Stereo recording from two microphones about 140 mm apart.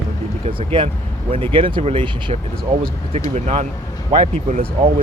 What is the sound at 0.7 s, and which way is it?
Speech, 35° right (ahead or behind).